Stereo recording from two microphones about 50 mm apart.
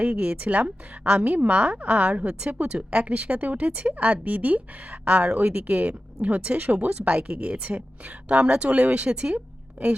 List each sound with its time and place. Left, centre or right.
0.0 s a woman's voice: right
9.8 s a woman's voice: right